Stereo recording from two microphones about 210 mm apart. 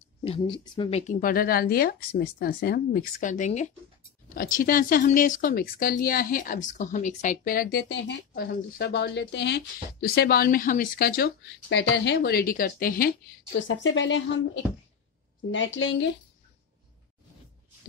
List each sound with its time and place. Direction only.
0.2 s speech: 25° left (ahead or behind)
1.2 s speech: 45° left (ahead or behind)
13.6 s speech: 65° left (ahead or behind)